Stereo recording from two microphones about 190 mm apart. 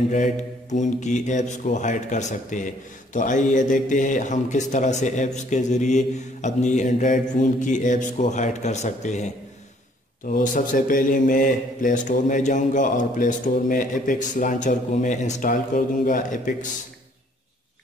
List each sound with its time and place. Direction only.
0.1 s a man's voice: 40° left (ahead or behind)